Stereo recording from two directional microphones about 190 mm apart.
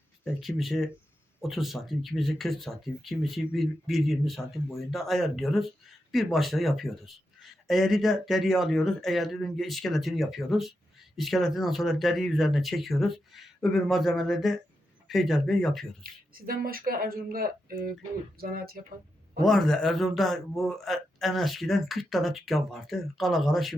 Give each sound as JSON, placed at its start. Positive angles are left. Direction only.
{"t": 0.3, "sound": "a man's voice", "side_deg": 0}
{"t": 16.3, "sound": "speech", "side_deg": -50}
{"t": 19.4, "sound": "a man's voice", "side_deg": 0}